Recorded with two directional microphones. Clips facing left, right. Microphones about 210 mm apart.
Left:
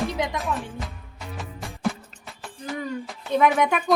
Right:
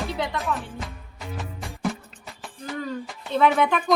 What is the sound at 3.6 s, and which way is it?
Speech, 10° left (ahead or behind).